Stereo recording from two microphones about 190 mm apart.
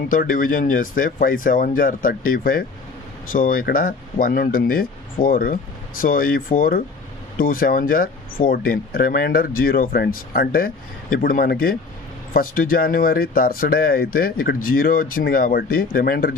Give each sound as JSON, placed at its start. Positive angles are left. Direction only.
{"t": 0.1, "sound": "speech", "side_deg": 45}